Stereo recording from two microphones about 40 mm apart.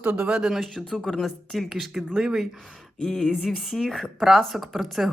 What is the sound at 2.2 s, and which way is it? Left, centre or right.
Speech, centre.